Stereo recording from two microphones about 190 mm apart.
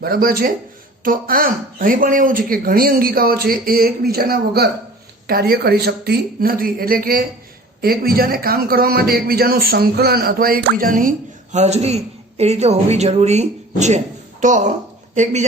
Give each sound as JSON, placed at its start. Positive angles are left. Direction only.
{"t": 0.0, "sound": "speech", "side_deg": -50}
{"t": 11.5, "sound": "a man's voice", "side_deg": -35}